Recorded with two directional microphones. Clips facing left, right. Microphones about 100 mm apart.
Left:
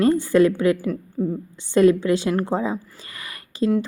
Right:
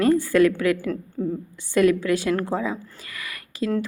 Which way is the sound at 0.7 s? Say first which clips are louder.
Left 1 dB; 5° left (ahead or behind).